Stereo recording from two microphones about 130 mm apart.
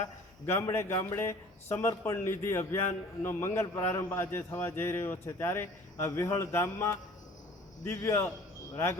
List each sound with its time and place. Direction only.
0.0 s a man's voice: 20° left (ahead or behind)